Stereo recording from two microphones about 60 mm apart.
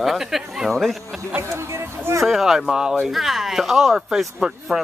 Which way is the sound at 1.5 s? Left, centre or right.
Right.